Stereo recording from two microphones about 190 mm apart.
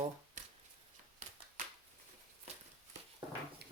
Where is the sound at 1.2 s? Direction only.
40° right (ahead or behind).